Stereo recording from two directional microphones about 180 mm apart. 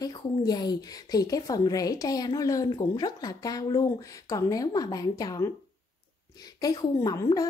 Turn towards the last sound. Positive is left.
turn(degrees=20)  # may be behind; listen again after turning